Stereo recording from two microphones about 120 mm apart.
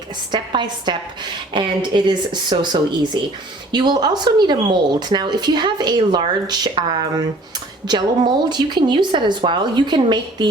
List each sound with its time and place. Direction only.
0.3 s speech: 40° right (ahead or behind)